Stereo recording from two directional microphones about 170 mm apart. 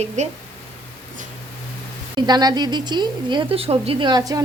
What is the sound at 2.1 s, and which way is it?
A woman's voice, 25° right (ahead or behind).